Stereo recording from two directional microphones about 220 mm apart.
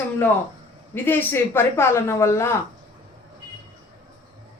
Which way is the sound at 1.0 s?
10° left (ahead or behind).